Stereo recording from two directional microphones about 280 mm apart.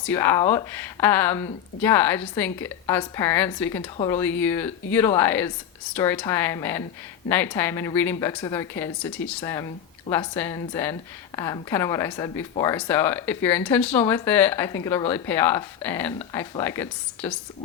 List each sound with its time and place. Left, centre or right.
0.0 s speech: centre